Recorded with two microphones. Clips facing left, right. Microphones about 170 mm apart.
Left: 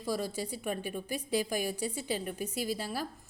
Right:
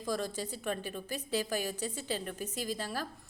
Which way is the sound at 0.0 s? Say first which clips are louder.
Left 1 dB; 10° left (ahead or behind).